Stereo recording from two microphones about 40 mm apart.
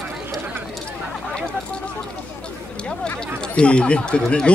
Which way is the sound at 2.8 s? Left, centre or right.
Left.